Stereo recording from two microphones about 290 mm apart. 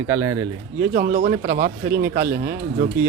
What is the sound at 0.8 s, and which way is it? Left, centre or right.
Speech, right.